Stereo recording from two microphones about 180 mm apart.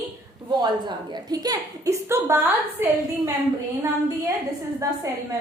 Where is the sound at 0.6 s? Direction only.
25° right (ahead or behind).